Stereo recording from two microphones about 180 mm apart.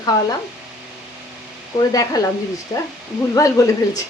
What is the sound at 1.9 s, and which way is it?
Speech, 20° left (ahead or behind).